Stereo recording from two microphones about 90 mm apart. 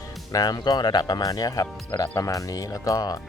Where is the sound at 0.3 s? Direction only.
45° left (ahead or behind).